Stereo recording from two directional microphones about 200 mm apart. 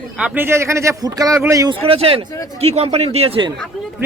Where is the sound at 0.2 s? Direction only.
10° right (ahead or behind); by 3.5 s 30° right (ahead or behind).